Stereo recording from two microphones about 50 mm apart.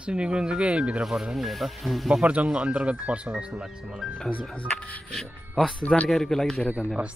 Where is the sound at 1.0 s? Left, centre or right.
Centre.